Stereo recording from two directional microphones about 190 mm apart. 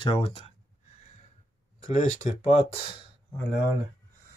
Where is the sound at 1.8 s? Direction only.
40° left (ahead or behind).